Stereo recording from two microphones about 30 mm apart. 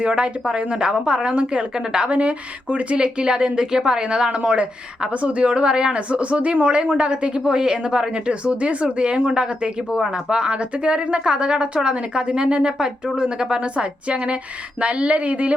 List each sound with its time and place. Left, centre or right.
0.1 s speech: right
2.0 s speech: right
7.5 s speech: right
8.4 s speech: right
14.8 s speech: right